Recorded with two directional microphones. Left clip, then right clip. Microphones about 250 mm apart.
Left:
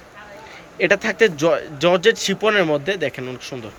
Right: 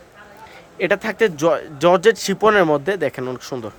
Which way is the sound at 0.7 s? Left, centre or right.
Centre.